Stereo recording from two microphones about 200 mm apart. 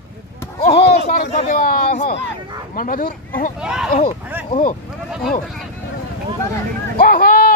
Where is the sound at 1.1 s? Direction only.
35° left (ahead or behind).